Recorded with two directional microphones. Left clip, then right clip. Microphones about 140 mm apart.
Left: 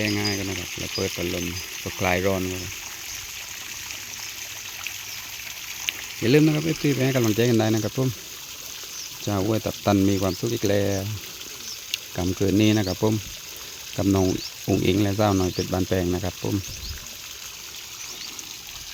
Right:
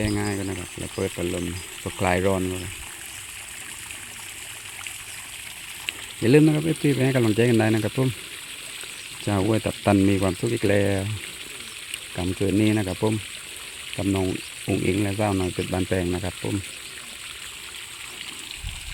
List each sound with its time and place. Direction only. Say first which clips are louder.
0.3 s a sound: left 2 dB; 10° right (ahead or behind)
0.8 s speech: even; 15° right (ahead or behind)
5.8 s speech: even; 15° right (ahead or behind)
9.2 s speech: right 1 dB; 15° right (ahead or behind)
12.1 s speech: left 1 dB; centre (ahead or behind)
13.9 s frying: left 3 dB; 20° left (ahead or behind)
14.7 s speech: left 2 dB; 10° left (ahead or behind)
15.5 s speech: left 1 dB; centre (ahead or behind)